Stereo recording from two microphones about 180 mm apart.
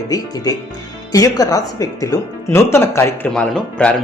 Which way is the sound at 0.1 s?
20° left (ahead or behind).